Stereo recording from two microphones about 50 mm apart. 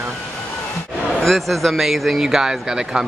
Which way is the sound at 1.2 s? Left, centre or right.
Centre.